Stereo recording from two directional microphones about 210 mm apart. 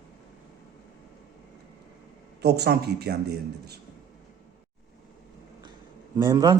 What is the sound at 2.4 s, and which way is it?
Speech, 50° right (ahead or behind).